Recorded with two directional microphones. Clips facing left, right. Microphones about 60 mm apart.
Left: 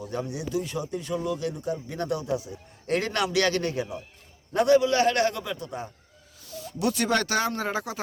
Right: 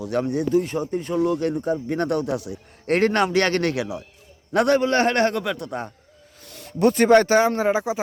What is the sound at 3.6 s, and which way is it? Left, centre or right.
Speech, right.